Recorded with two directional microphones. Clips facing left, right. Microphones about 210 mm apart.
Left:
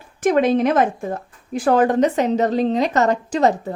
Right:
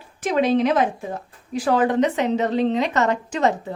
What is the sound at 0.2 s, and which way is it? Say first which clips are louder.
A woman's voice: left 3 dB; 50° left (ahead or behind).